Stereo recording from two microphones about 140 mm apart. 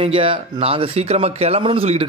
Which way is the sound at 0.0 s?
40° right (ahead or behind).